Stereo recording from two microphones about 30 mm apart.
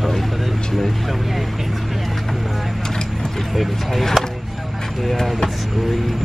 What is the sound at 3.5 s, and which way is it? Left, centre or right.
Speech, centre.